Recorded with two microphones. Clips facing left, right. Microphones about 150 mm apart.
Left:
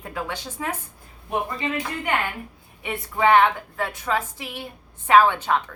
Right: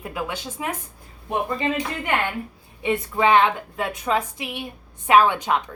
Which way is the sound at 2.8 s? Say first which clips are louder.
Right 1 dB; 20° right (ahead or behind).